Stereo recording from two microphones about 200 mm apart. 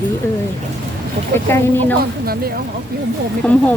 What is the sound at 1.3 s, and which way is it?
Speech, 10° left (ahead or behind).